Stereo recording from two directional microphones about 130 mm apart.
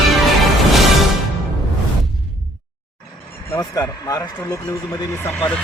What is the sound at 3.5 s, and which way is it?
Speech, 25° left (ahead or behind).